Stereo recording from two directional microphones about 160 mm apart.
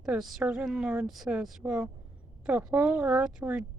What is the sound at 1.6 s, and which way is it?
Speech, 15° right (ahead or behind).